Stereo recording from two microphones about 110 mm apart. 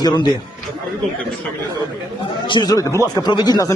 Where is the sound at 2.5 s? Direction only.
40° left (ahead or behind).